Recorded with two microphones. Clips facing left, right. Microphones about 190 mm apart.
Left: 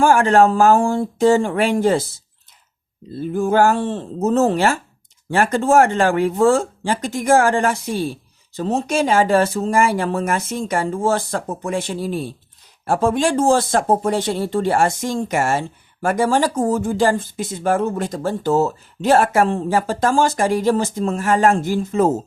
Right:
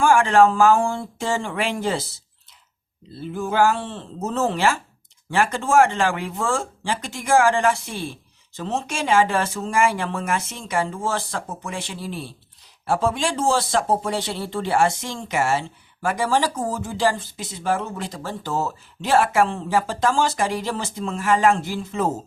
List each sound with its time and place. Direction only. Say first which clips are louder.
0.0 s speech: left 2 dB; 40° left (ahead or behind)
3.1 s speech: left 7 dB; 45° left (ahead or behind)